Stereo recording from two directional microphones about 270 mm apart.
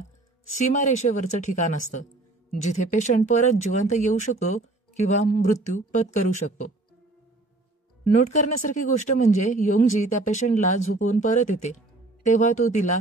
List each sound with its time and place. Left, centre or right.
0.6 s speech: left
8.1 s speech: left